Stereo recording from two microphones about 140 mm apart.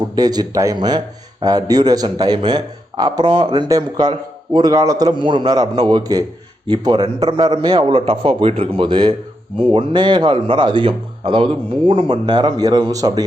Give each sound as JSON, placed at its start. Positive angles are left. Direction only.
{"t": 0.2, "sound": "a man's voice", "side_deg": -25}